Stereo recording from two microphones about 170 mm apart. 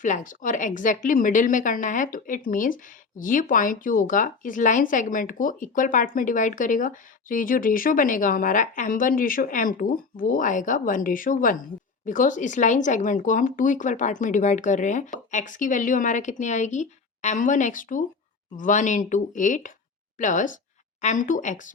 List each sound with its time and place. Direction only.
0.0 s a woman's voice: 45° left (ahead or behind)